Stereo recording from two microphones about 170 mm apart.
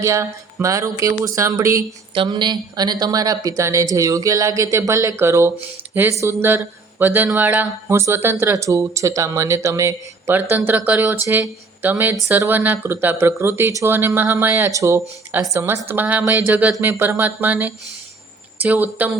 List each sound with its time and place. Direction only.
0.0 s speech: 15° right (ahead or behind)
2.1 s speech: 25° right (ahead or behind); by 19.1 s 10° right (ahead or behind)